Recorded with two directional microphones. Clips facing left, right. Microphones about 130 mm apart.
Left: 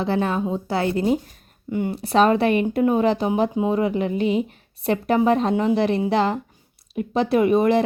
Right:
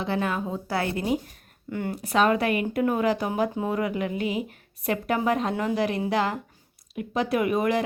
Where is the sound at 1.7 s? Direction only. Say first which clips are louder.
Left 6 dB; 15° left (ahead or behind).